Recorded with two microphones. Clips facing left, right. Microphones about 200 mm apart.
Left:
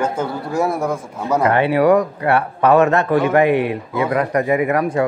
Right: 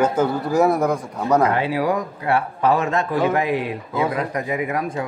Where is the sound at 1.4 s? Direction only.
65° left (ahead or behind).